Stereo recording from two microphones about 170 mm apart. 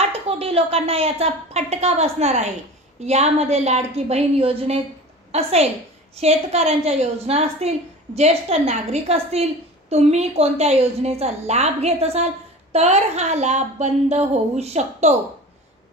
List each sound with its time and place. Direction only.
0.0 s a woman's voice: 35° right (ahead or behind)